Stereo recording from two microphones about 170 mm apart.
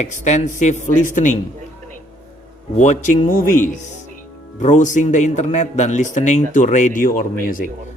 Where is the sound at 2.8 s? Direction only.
45° left (ahead or behind).